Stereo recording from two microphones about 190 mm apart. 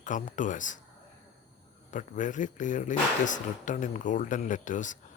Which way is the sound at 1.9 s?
40° left (ahead or behind).